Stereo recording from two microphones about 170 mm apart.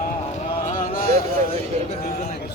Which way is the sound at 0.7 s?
50° left (ahead or behind).